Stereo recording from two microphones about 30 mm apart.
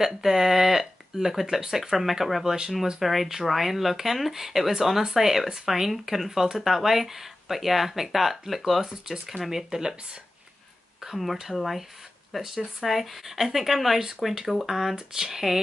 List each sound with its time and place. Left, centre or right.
0.0 s speech: centre
2.4 s speech: right
3.0 s speech: centre
8.8 s speech: centre
9.3 s speech: centre
9.7 s speech: right
11.5 s speech: centre
13.9 s speech: centre